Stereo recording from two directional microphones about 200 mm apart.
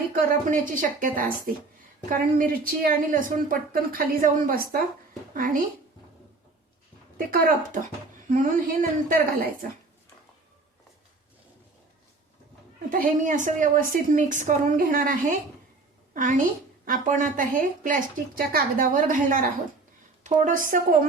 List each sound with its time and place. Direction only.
0.1 s speech: 45° right (ahead or behind)
7.3 s speech: 45° right (ahead or behind)
12.9 s a woman's voice: 40° right (ahead or behind)